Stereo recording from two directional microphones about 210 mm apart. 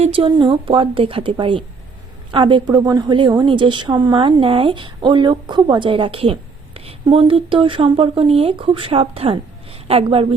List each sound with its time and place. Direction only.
0.0 s speech: 25° right (ahead or behind)